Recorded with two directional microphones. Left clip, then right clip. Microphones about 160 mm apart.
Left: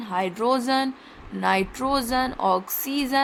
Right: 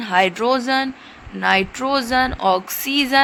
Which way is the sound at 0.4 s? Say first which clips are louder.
Right 4 dB; centre (ahead or behind).